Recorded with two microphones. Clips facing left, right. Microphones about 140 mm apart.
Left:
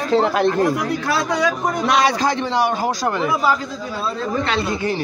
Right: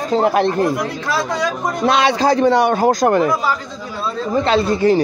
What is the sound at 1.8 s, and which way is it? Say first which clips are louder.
Speech: right 4 dB; 30° right (ahead or behind).